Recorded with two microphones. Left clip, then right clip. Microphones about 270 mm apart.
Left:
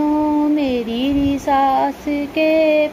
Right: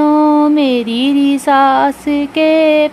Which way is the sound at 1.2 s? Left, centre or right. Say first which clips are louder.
Right 6 dB; right.